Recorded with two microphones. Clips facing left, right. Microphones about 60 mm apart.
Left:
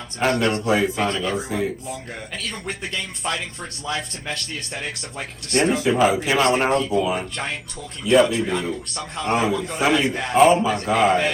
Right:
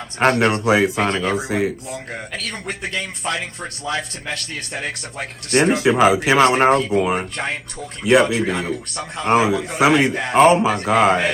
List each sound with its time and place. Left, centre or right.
0.2 s speech: right
0.5 s speech: right
1.1 s speech: right
1.4 s speech: right
2.6 s speech: centre
5.5 s speech: right
5.7 s speech: right
6.9 s speech: right
7.3 s speech: right
8.0 s speech: right
9.0 s speech: right
9.3 s a man's voice: right